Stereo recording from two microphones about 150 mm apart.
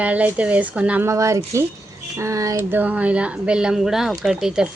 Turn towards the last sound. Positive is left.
turn(degrees=-5)  # may be behind; listen again after turning